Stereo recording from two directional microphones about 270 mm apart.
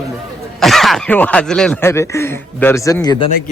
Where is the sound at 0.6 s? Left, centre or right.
Centre.